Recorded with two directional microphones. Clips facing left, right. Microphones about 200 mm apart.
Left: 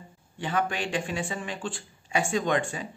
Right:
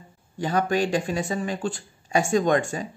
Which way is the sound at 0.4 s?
40° right (ahead or behind).